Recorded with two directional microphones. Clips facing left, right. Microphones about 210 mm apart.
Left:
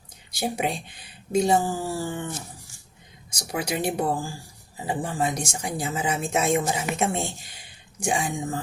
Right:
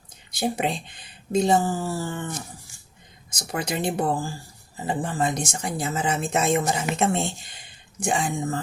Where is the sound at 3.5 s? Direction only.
10° left (ahead or behind).